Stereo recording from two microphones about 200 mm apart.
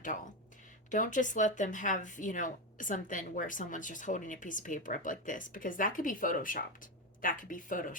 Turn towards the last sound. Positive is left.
turn(degrees=40)  # may be behind; listen again after turning